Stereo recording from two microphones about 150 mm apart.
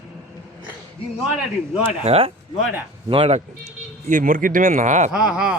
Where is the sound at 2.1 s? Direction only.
40° right (ahead or behind).